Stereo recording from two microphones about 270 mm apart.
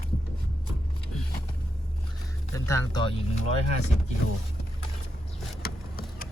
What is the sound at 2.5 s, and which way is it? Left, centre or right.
Speech, centre.